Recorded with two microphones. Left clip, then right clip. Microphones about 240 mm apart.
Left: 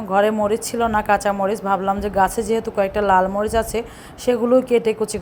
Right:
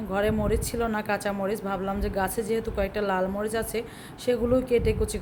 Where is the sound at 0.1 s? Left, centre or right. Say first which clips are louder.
Left 9 dB; centre.